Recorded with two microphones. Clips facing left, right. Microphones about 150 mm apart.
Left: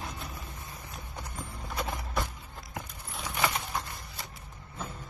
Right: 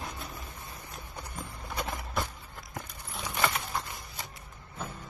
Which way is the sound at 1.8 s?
Centre (ahead or behind).